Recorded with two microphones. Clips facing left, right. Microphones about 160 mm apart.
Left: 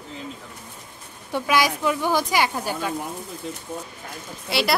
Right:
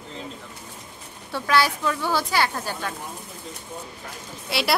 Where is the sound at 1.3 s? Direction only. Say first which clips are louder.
Left 1 dB; 15° left (ahead or behind).